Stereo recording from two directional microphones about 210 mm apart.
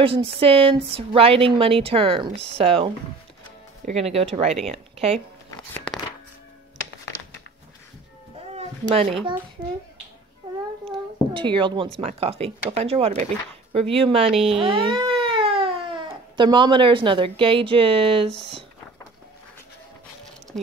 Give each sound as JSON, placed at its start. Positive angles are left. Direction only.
{"t": 0.0, "sound": "a woman's voice", "side_deg": -25}
{"t": 8.5, "sound": "a sound", "side_deg": -30}
{"t": 9.6, "sound": "speech", "side_deg": -25}
{"t": 10.4, "sound": "child singing", "side_deg": -25}
{"t": 10.9, "sound": "a sound", "side_deg": -25}
{"t": 12.0, "sound": "speech", "side_deg": -30}